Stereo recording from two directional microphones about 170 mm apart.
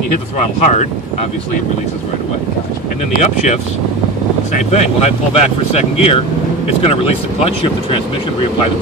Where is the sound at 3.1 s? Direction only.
45° left (ahead or behind).